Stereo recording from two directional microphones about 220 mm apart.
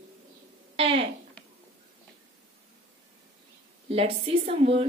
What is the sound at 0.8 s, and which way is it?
Speech, 25° right (ahead or behind).